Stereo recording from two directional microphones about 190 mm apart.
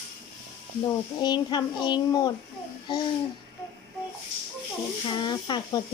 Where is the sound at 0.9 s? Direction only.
20° left (ahead or behind).